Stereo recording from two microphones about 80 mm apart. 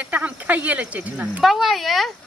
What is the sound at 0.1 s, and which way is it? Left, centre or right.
Speech, right.